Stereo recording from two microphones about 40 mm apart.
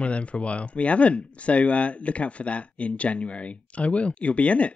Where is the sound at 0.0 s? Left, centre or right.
Left.